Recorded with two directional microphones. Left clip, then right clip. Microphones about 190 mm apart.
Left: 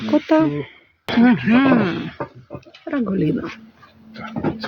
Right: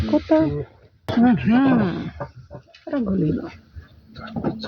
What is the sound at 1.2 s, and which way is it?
Speech, 25° left (ahead or behind).